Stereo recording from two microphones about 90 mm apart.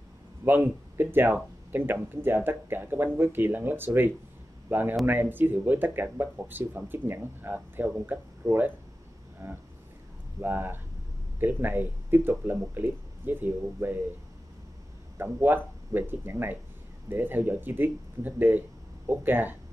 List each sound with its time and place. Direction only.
0.5 s speech: 25° right (ahead or behind)
9.4 s speech: 35° right (ahead or behind)
10.4 s speech: 20° right (ahead or behind)
15.1 s speech: 25° right (ahead or behind)